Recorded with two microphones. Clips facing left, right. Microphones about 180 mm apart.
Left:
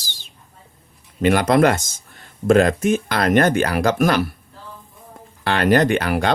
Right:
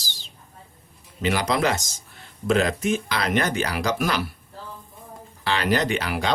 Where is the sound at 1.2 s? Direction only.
55° left (ahead or behind).